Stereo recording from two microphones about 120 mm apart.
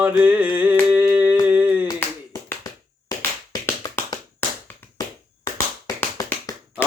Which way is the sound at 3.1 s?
30° left (ahead or behind).